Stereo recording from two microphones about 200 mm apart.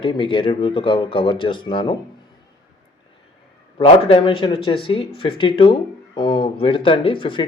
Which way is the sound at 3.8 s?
25° left (ahead or behind).